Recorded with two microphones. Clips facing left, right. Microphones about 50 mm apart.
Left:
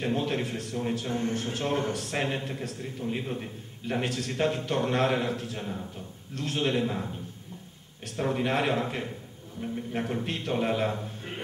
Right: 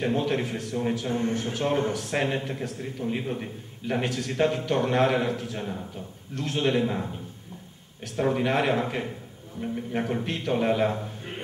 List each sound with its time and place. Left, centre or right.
0.3 s speech: centre
8.2 s a man's voice: centre